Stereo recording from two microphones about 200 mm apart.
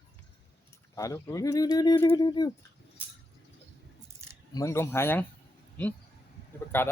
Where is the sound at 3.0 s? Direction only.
10° right (ahead or behind).